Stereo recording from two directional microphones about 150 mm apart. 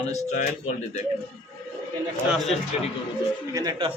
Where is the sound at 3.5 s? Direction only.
25° right (ahead or behind).